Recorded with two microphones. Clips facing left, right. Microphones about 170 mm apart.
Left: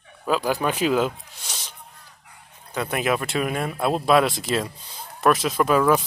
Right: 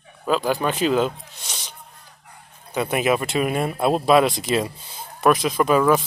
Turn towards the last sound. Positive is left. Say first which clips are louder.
# right 1 dB
turn(degrees=0)  # may be behind; listen again after turning